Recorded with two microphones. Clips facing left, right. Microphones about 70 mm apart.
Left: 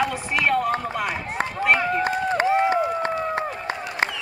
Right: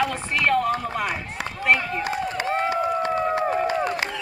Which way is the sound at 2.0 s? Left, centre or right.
Left.